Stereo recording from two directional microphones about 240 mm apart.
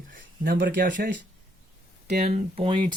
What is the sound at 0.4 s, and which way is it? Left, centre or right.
Speech, right.